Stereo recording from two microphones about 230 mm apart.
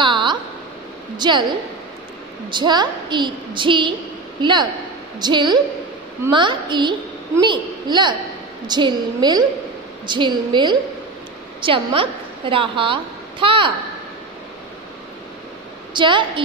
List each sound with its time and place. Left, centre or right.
0.0 s a sound: centre
1.1 s a woman's voice: centre
2.5 s a woman's voice: centre
15.9 s a woman's voice: right